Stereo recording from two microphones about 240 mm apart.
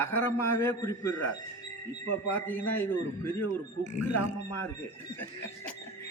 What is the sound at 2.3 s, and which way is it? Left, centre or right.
Speech, centre.